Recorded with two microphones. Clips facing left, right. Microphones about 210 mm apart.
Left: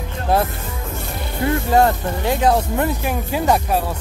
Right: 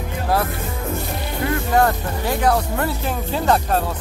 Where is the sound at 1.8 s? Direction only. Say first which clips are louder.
Left 1 dB; 20° left (ahead or behind).